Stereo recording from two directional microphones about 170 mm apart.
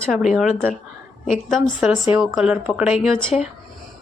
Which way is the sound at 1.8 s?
10° right (ahead or behind).